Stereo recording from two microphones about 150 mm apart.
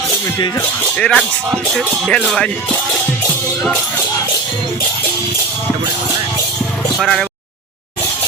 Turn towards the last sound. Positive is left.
turn(degrees=0)  # may be behind; listen again after turning